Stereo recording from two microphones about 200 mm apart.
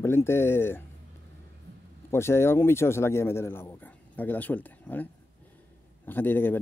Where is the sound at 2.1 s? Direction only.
15° left (ahead or behind).